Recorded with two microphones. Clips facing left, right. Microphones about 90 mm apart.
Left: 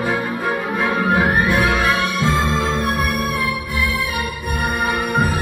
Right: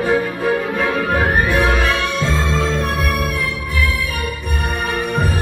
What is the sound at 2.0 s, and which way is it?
Music, 50° left (ahead or behind).